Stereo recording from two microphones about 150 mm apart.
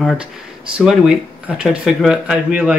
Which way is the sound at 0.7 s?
5° right (ahead or behind).